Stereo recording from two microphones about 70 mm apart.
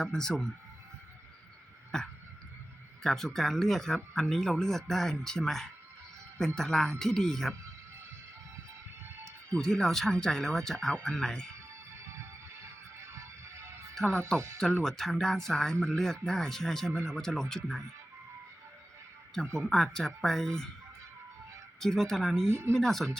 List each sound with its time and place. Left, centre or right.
0.0 s speech: centre
1.9 s a sound: centre
3.0 s speech: centre
9.6 s speech: centre
13.0 s music: right
13.9 s speech: centre
19.5 s speech: centre
21.8 s speech: centre
22.4 s speech: right
22.7 s speech: centre